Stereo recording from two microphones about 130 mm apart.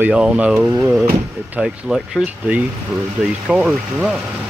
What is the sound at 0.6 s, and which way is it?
Speech, 20° right (ahead or behind).